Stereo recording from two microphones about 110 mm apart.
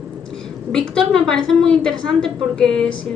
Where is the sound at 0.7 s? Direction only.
5° left (ahead or behind).